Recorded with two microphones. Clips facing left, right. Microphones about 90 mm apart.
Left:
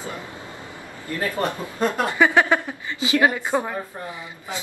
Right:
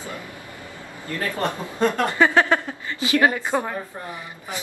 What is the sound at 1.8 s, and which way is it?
A woman's voice, 15° left (ahead or behind).